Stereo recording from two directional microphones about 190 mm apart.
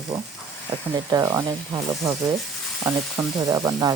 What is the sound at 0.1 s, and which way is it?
Speech, 10° right (ahead or behind).